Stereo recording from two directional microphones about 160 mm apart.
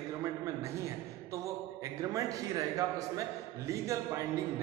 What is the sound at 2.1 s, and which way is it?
A man's voice, 20° right (ahead or behind).